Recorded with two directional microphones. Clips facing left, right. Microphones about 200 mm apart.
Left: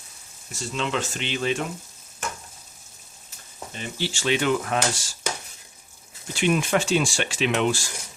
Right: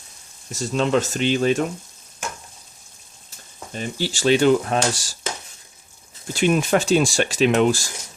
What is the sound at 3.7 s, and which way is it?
Speech, 40° right (ahead or behind).